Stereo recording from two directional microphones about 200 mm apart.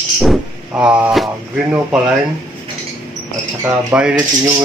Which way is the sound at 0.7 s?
10° right (ahead or behind).